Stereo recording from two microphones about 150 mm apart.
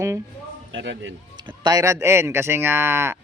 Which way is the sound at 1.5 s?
25° right (ahead or behind).